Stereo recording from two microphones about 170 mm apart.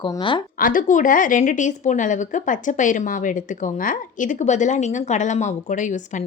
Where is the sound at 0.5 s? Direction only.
55° left (ahead or behind).